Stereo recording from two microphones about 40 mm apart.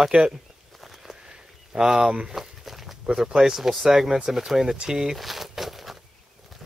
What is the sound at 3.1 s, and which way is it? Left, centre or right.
Speech, centre.